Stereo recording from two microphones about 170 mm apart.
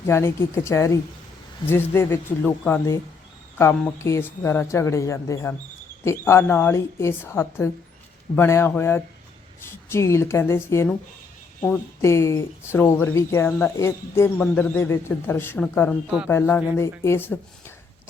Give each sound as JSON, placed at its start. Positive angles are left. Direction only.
{"t": 0.0, "sound": "speech", "side_deg": 15}
{"t": 16.0, "sound": "speech", "side_deg": -5}
{"t": 16.6, "sound": "speech", "side_deg": 15}